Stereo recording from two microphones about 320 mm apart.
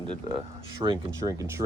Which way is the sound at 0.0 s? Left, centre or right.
Centre.